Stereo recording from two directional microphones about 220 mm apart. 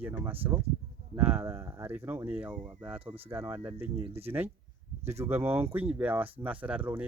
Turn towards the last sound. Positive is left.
turn(degrees=-5)  # may be behind; listen again after turning